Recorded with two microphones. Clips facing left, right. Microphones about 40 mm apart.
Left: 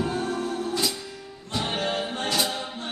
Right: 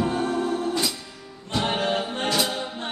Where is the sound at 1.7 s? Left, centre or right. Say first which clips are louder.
Right 2 dB; right.